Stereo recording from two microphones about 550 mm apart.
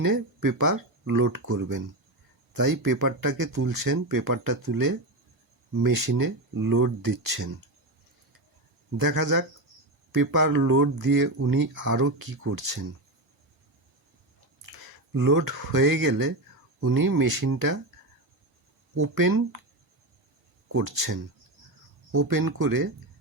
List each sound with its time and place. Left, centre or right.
0.0 s speech: right
2.8 s speech: right
9.0 s speech: right
15.1 s speech: right
18.9 s speech: right
20.7 s speech: right